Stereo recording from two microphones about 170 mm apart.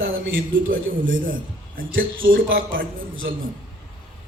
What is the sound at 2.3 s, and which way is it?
A man's voice, 75° right (ahead or behind).